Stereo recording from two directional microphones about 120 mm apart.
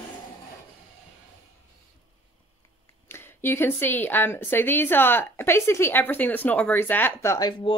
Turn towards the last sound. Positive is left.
turn(degrees=45)  # may be behind; listen again after turning